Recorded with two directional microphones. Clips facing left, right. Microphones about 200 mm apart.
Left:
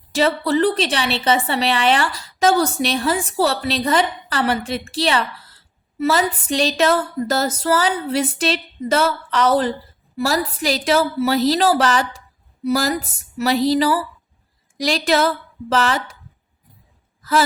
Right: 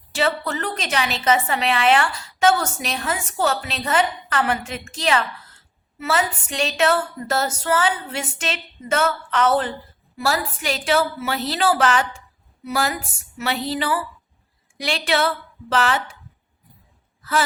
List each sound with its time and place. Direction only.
0.1 s a woman's voice: 40° left (ahead or behind)